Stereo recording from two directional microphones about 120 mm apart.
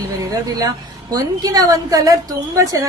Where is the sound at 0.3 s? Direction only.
30° right (ahead or behind).